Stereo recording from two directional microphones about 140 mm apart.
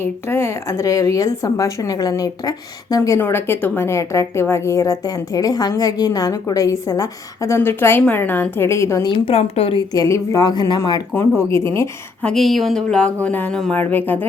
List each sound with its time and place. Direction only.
0.0 s speech: 15° left (ahead or behind)
9.2 s speech: 45° left (ahead or behind)
9.9 s speech: 25° left (ahead or behind)
11.5 s speech: 20° left (ahead or behind)
12.2 s speech: centre (ahead or behind)